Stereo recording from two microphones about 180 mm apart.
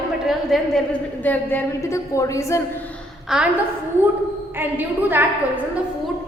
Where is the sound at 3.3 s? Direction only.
Centre (ahead or behind).